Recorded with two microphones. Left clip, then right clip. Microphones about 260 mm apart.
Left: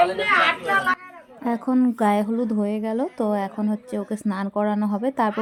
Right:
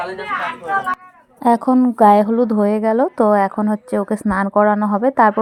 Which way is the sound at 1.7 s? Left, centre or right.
Centre.